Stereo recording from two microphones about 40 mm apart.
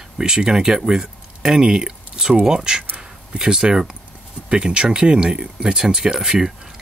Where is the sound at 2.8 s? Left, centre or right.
Right.